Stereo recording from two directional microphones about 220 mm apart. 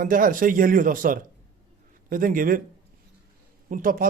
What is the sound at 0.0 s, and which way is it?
Speech, 40° right (ahead or behind).